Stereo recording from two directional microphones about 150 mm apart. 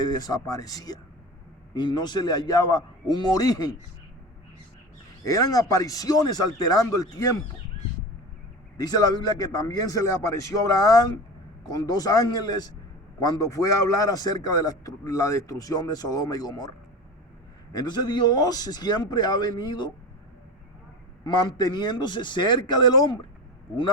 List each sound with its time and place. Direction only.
0.0 s a man's voice: 25° left (ahead or behind)
5.2 s a man's voice: 25° left (ahead or behind)
8.8 s a man's voice: 25° left (ahead or behind)
21.2 s a man's voice: 30° left (ahead or behind)